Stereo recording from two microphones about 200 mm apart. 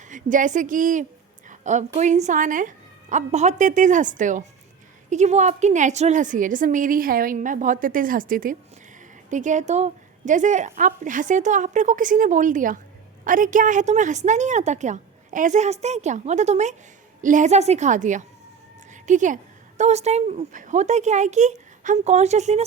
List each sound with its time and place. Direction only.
0.1 s a woman's voice: 40° right (ahead or behind)